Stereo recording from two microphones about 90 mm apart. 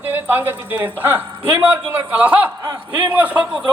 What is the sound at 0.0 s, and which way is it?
A man's voice, 20° right (ahead or behind).